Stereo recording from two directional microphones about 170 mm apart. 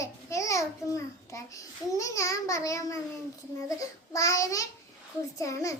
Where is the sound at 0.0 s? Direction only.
20° left (ahead or behind).